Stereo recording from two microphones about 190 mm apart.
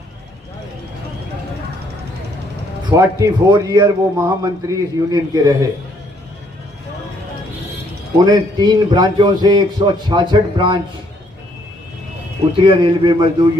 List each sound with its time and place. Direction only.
2.9 s a man's voice: 20° right (ahead or behind)
8.2 s a man's voice: 20° right (ahead or behind)
12.5 s a man's voice: 25° right (ahead or behind)